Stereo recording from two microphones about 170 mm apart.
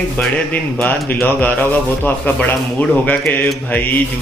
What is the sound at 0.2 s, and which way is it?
Music, 5° left (ahead or behind).